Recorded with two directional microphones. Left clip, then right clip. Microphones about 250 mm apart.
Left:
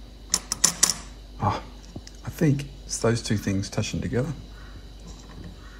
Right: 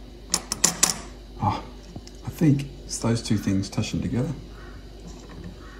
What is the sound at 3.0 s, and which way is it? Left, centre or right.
Speech, centre.